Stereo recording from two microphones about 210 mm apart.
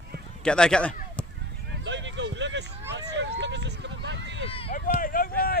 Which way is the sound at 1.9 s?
60° right (ahead or behind).